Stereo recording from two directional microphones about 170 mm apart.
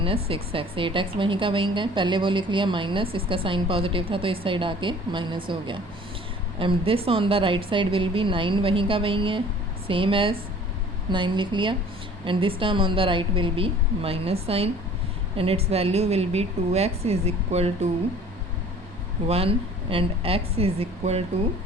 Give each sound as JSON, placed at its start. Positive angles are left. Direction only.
{"t": 0.0, "sound": "a woman's voice", "side_deg": -35}
{"t": 19.3, "sound": "a woman's voice", "side_deg": -35}